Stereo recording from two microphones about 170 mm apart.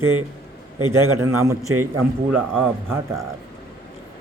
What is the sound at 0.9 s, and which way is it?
Speech, 15° right (ahead or behind).